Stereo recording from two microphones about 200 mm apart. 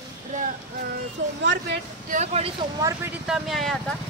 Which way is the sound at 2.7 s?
15° right (ahead or behind).